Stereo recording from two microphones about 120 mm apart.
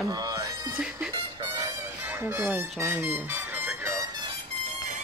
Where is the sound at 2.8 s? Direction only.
20° right (ahead or behind); by 4.4 s 35° right (ahead or behind).